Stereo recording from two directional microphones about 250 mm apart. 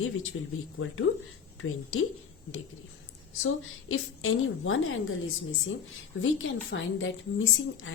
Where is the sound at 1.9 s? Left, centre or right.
Left.